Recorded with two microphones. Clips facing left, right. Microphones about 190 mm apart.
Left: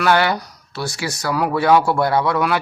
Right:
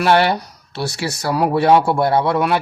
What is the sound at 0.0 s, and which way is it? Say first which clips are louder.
Speech: right 2 dB; 30° right (ahead or behind).